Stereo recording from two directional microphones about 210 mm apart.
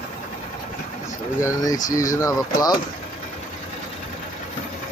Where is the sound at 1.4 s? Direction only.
15° left (ahead or behind).